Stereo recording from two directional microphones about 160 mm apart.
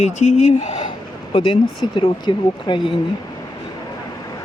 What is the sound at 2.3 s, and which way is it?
Speech, 30° left (ahead or behind).